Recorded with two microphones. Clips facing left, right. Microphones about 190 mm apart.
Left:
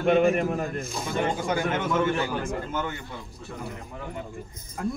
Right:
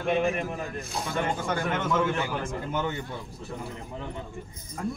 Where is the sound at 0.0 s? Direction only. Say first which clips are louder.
Left 5 dB; 45° left (ahead or behind).